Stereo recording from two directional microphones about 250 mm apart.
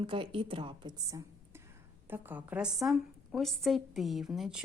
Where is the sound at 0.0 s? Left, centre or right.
Right.